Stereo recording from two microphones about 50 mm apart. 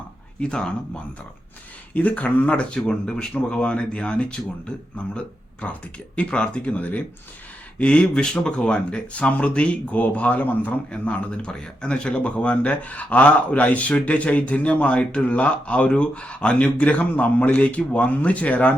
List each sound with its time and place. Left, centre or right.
0.3 s a man's voice: centre
1.9 s a man's voice: left
7.8 s a man's voice: left